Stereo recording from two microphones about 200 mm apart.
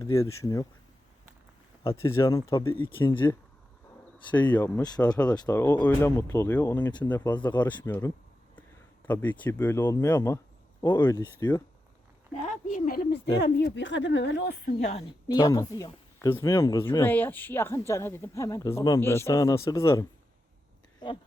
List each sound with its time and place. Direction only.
0.0 s speech: 15° left (ahead or behind)
2.0 s speech: 15° left (ahead or behind)
5.1 s speech: 5° left (ahead or behind)
12.4 s speech: 40° left (ahead or behind)
13.4 s speech: 55° left (ahead or behind)
14.8 s speech: 35° left (ahead or behind)
15.3 s speech: 20° left (ahead or behind)